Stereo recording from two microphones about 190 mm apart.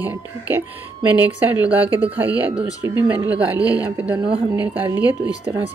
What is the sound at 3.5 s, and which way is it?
Speech, 20° left (ahead or behind).